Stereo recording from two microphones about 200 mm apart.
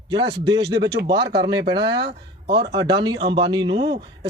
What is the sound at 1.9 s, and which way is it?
Speech, 55° right (ahead or behind).